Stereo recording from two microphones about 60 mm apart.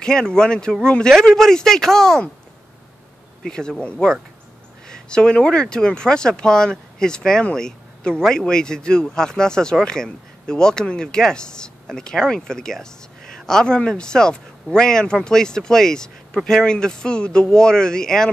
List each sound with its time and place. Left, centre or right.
0.0 s speech: centre
3.4 s speech: centre